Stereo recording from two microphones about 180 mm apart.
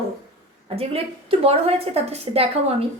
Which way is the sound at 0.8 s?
30° right (ahead or behind).